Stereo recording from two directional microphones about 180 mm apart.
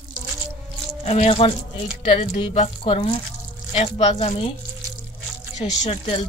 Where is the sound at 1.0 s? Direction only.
35° left (ahead or behind).